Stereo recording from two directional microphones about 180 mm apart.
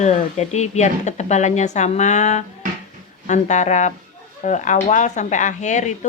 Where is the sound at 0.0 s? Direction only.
40° left (ahead or behind).